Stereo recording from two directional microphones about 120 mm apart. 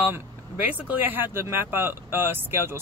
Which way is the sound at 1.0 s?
15° right (ahead or behind).